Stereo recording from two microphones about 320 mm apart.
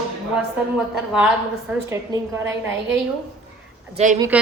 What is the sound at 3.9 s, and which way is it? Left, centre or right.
Speech, right.